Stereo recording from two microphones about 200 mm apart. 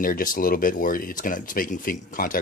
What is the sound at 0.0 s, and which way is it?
Speech, 45° left (ahead or behind).